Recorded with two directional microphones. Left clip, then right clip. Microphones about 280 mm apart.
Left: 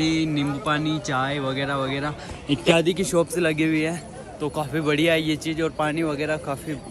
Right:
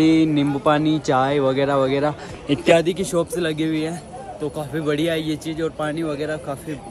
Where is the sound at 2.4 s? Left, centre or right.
Centre.